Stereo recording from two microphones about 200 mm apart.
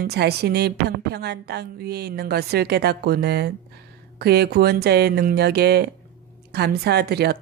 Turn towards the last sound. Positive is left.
turn(degrees=-55)  # may be behind; listen again after turning